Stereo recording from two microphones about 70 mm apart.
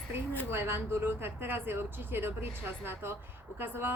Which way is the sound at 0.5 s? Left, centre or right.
Right.